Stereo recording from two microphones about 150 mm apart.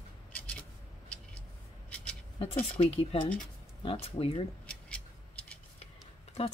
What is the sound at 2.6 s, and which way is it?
A woman's voice, 40° left (ahead or behind).